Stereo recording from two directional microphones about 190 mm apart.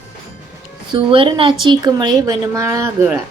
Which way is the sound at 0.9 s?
25° right (ahead or behind).